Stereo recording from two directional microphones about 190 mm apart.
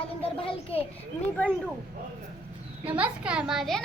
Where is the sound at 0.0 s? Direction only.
30° left (ahead or behind).